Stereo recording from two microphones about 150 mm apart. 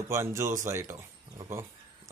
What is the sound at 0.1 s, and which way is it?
Speech, 20° right (ahead or behind).